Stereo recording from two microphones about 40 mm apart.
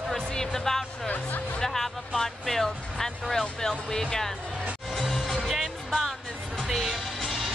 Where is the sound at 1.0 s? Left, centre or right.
Left.